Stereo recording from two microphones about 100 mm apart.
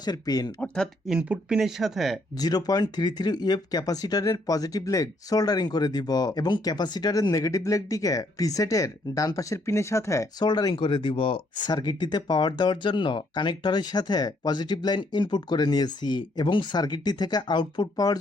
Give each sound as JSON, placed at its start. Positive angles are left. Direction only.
{"t": 0.0, "sound": "speech", "side_deg": 40}
{"t": 1.2, "sound": "speech", "side_deg": -10}
{"t": 2.4, "sound": "speech", "side_deg": 40}
{"t": 10.4, "sound": "speech", "side_deg": 45}